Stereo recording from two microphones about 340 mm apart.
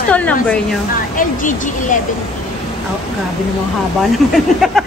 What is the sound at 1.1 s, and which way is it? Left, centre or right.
Speech, left.